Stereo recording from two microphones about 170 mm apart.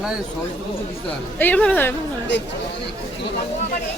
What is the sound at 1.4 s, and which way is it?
Speech, 10° left (ahead or behind).